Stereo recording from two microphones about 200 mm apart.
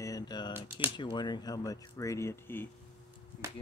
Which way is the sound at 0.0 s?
20° left (ahead or behind).